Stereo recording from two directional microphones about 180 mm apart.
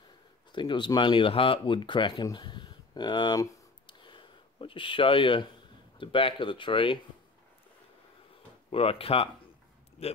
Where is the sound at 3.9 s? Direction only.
25° left (ahead or behind).